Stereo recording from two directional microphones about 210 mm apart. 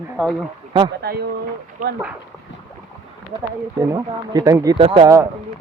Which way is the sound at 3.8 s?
15° right (ahead or behind).